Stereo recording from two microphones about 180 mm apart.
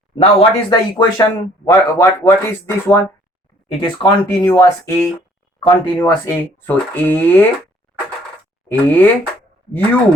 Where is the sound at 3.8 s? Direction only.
25° left (ahead or behind).